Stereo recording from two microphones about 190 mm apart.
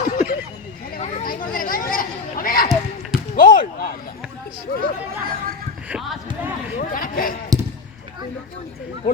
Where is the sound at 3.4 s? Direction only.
45° left (ahead or behind).